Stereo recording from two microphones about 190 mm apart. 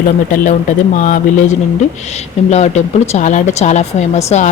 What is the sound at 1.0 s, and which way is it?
Speech, 45° left (ahead or behind).